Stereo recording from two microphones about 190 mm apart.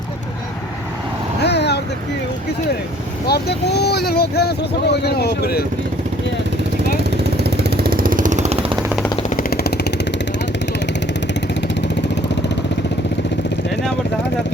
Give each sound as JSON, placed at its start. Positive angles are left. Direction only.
{"t": 1.5, "sound": "vehicle", "side_deg": 60}
{"t": 3.2, "sound": "speech", "side_deg": 60}
{"t": 7.4, "sound": "vehicle", "side_deg": -60}
{"t": 9.3, "sound": "vehicle", "side_deg": 50}
{"t": 11.7, "sound": "vehicle", "side_deg": 65}